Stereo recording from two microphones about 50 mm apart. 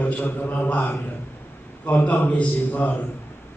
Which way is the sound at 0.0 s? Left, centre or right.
Left.